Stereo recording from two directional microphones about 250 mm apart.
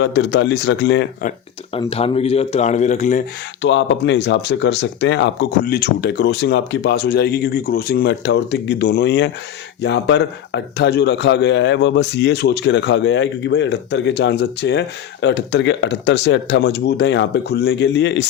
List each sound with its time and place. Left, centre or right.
0.0 s a man's voice: left
1.7 s speech: left
3.6 s a man's voice: left